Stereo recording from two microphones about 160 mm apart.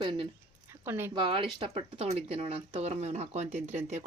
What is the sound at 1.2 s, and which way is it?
Speech, 30° right (ahead or behind).